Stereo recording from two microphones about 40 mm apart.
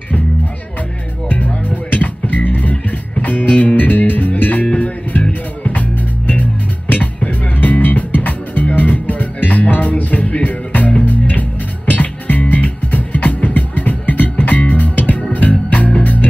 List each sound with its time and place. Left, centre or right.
1.3 s music: left